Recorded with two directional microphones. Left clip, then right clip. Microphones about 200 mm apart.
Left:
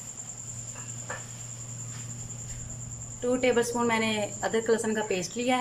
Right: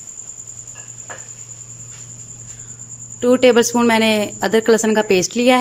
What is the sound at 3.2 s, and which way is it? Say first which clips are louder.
Speech: right 13 dB; 55° right (ahead or behind).